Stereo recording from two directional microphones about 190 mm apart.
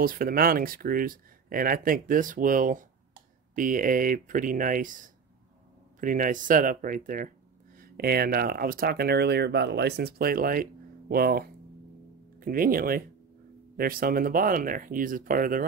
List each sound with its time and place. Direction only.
0.0 s speech: 50° right (ahead or behind)